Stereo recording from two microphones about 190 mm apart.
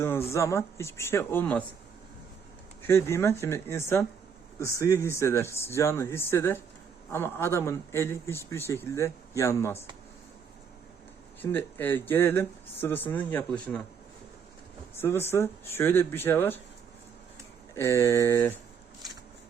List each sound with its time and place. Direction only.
0.0 s speech: 10° left (ahead or behind)
2.8 s speech: 15° left (ahead or behind)
11.5 s speech: 10° left (ahead or behind)
14.9 s speech: 10° left (ahead or behind)
17.7 s speech: 15° left (ahead or behind)